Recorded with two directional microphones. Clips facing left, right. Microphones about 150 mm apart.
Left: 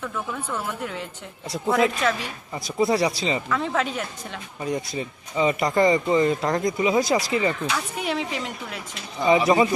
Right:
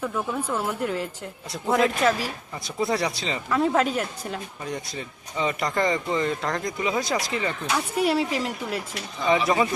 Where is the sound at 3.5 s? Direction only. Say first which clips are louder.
Right 3 dB; 10° right (ahead or behind).